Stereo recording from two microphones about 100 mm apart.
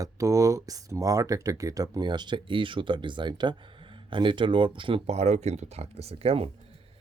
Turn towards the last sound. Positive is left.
turn(degrees=-75)  # may be behind; listen again after turning